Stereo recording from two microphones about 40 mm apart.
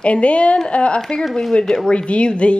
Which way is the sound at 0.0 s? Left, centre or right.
Left.